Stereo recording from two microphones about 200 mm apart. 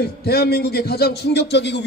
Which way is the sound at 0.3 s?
50° left (ahead or behind).